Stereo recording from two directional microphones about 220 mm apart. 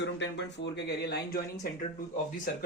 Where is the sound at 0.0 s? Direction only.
55° left (ahead or behind).